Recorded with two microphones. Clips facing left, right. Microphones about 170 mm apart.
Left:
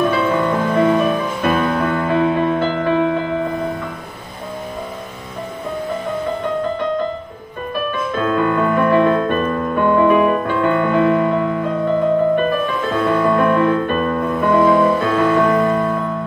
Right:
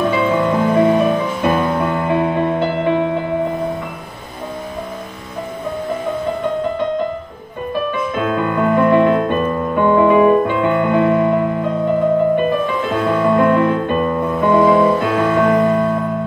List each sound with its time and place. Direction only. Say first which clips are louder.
0.7 s music: right 2 dB; 20° right (ahead or behind)
7.9 s music: left 3 dB; 20° right (ahead or behind)
15.1 s music: right 1 dB; 20° right (ahead or behind)